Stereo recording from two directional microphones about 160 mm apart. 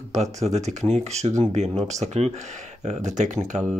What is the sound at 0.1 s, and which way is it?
Speech, 45° right (ahead or behind).